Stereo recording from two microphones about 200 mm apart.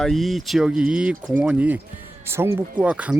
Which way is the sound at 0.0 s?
Centre (ahead or behind).